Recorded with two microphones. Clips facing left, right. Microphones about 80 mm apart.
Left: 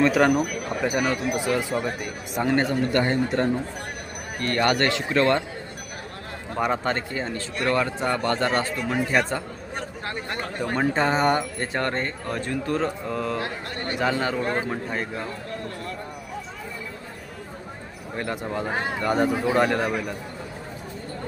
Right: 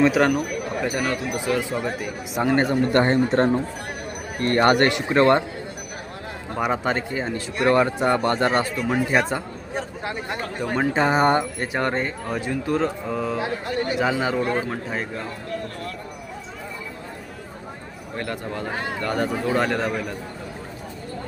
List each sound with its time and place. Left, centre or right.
0.0 s speech: centre
2.6 s speech: right
6.6 s speech: centre
11.1 s speech: right
11.6 s speech: centre
18.2 s speech: centre